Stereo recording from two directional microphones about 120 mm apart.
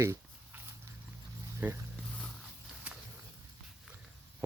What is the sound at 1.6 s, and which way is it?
Speech, 15° right (ahead or behind).